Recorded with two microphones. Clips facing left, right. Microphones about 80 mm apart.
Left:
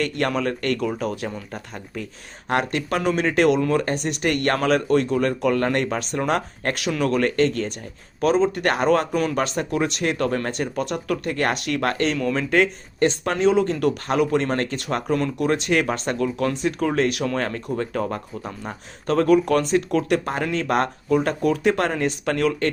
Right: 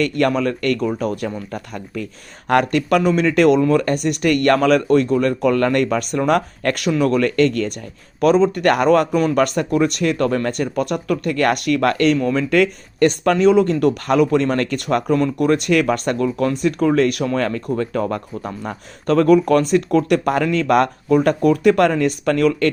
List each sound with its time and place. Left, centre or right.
0.0 s speech: right
7.3 s speech: right